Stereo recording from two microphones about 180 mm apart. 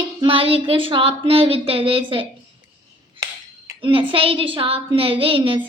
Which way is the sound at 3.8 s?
30° right (ahead or behind).